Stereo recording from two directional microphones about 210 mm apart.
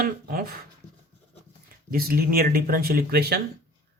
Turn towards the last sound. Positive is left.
turn(degrees=-45)  # may be behind; listen again after turning